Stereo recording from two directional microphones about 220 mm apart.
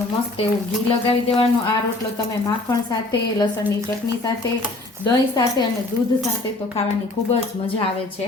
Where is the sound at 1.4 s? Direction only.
20° left (ahead or behind).